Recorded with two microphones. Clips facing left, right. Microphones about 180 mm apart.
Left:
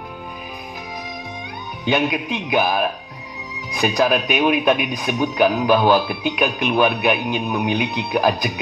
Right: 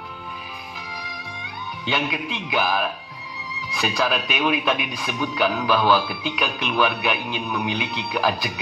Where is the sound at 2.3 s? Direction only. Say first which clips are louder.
Left 3 dB; 45° left (ahead or behind).